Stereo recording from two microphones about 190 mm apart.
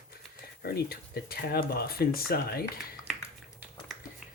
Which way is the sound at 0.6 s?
55° left (ahead or behind).